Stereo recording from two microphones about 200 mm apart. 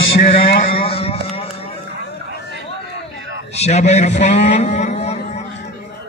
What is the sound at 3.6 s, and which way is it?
A man's voice, 35° left (ahead or behind).